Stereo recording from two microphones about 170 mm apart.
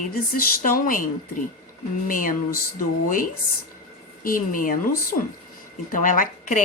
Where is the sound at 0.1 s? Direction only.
60° left (ahead or behind).